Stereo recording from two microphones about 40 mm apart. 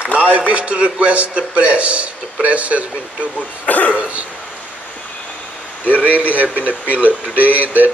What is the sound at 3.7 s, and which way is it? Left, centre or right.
Speech, left.